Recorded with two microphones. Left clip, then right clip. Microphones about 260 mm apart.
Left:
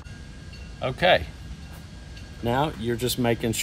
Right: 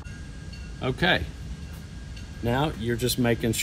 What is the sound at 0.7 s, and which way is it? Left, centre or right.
Speech, left.